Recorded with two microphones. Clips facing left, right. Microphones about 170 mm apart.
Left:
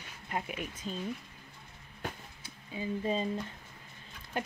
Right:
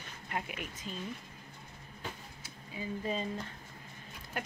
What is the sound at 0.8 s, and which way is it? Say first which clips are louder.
Speech: left 4 dB; 35° left (ahead or behind).